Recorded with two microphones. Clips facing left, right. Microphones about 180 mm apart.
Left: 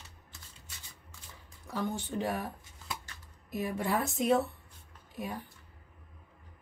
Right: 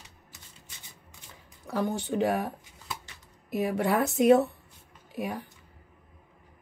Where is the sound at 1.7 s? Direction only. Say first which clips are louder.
Right 6 dB; 70° right (ahead or behind).